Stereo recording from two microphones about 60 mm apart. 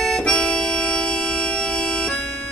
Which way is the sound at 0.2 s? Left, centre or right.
Centre.